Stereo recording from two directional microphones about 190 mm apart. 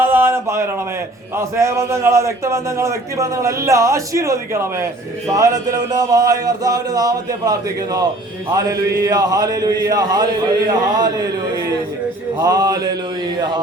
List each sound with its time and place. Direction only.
0.0 s a sound: 10° right (ahead or behind)
1.4 s a man's voice: 15° right (ahead or behind)
12.4 s speech: 20° right (ahead or behind)